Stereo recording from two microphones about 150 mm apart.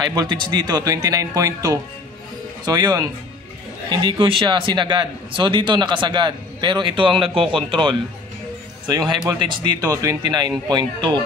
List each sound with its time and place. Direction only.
0.1 s speech: 30° right (ahead or behind)
8.9 s speech: 25° right (ahead or behind)